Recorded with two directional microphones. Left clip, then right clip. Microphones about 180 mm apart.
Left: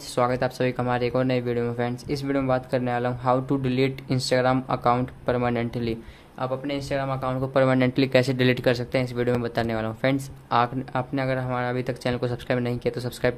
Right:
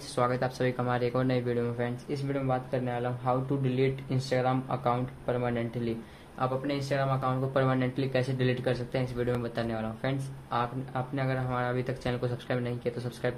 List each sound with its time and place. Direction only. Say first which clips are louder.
0.1 s speech: left 5 dB; 30° left (ahead or behind)